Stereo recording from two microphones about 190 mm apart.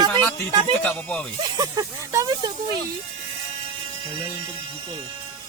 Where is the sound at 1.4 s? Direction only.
20° right (ahead or behind).